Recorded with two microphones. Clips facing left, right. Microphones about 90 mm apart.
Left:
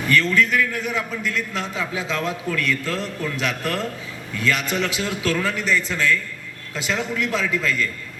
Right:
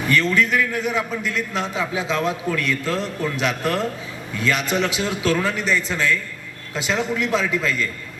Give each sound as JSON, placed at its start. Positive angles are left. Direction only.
{"t": 0.1, "sound": "a man's voice", "side_deg": -20}